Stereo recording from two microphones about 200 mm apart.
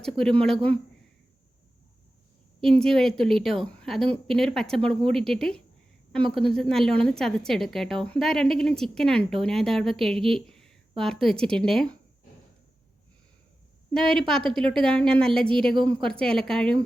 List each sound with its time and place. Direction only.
0.0 s speech: 5° left (ahead or behind)
2.6 s speech: 5° left (ahead or behind)
13.9 s speech: 5° left (ahead or behind)
15.7 s a woman's voice: 25° right (ahead or behind)
16.0 s speech: 5° left (ahead or behind)